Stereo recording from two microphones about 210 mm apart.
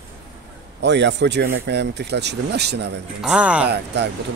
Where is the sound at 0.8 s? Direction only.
55° right (ahead or behind).